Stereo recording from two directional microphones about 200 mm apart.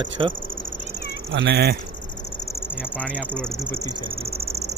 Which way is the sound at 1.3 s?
55° right (ahead or behind).